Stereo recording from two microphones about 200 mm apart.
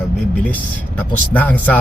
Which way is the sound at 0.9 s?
10° left (ahead or behind).